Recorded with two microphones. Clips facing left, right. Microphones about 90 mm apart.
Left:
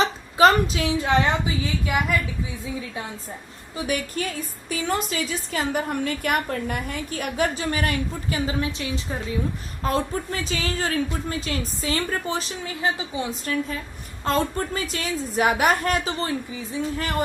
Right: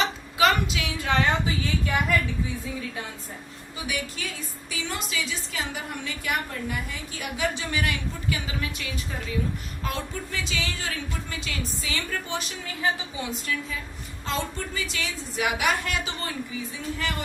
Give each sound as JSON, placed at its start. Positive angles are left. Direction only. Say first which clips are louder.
{"t": 0.0, "sound": "a sound", "louder": "left 5 dB", "side_deg": 35}
{"t": 0.9, "sound": "a woman's voice", "louder": "left 2 dB", "side_deg": 20}
{"t": 1.8, "sound": "a woman's voice", "louder": "left 2 dB", "side_deg": 5}
{"t": 3.8, "sound": "a woman's voice", "louder": "left 6 dB", "side_deg": 45}
{"t": 13.4, "sound": "a woman's voice", "louder": "left 4 dB", "side_deg": 40}